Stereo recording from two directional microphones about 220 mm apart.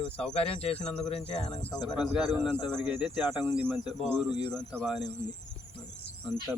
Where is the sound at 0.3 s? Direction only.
25° left (ahead or behind).